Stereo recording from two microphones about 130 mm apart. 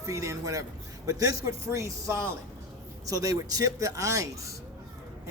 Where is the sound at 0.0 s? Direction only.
25° right (ahead or behind).